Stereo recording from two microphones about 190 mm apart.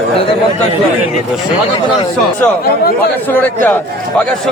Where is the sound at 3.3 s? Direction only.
10° left (ahead or behind).